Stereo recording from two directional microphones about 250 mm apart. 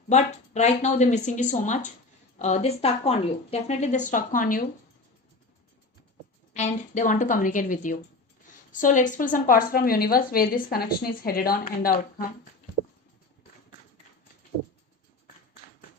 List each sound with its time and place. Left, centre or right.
0.1 s speech: left
6.5 s speech: left